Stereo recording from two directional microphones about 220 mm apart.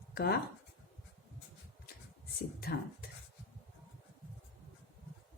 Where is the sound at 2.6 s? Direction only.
45° left (ahead or behind).